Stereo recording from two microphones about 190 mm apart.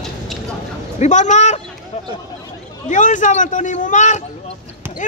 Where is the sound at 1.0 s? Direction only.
40° left (ahead or behind).